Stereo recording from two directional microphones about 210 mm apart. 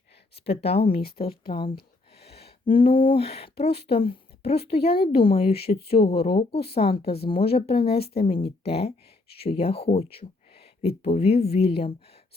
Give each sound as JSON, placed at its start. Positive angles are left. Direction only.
{"t": 0.3, "sound": "a woman's voice", "side_deg": 30}
{"t": 6.1, "sound": "speech", "side_deg": 45}
{"t": 6.7, "sound": "speech", "side_deg": 25}